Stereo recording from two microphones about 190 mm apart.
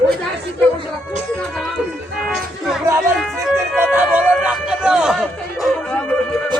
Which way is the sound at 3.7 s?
10° right (ahead or behind).